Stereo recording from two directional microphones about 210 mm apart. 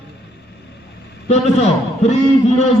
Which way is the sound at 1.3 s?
30° left (ahead or behind).